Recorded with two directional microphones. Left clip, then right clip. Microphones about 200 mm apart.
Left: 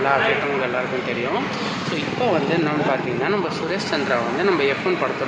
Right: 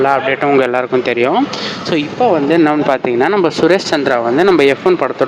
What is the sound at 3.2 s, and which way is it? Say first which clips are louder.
Speech: right 10 dB; 45° right (ahead or behind).